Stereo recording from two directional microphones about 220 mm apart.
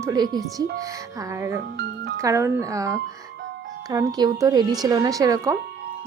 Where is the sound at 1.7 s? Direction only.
50° right (ahead or behind).